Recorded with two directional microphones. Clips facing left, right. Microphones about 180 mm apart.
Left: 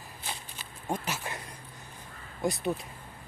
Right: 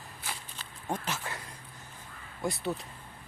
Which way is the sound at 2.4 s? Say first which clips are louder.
Left 3 dB; 15° left (ahead or behind).